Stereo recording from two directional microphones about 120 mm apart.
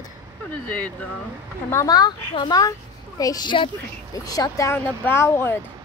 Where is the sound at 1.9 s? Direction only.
35° left (ahead or behind).